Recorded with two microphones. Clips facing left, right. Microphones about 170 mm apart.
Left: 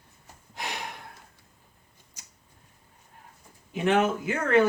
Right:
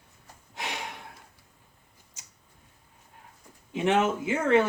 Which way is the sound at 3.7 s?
25° right (ahead or behind).